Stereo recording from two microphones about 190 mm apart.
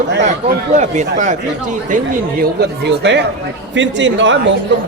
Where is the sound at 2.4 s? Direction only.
60° right (ahead or behind).